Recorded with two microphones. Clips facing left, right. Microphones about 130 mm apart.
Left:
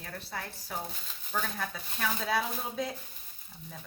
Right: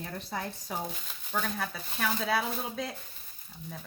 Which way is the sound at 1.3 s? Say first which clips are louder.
Right 2 dB; 5° right (ahead or behind).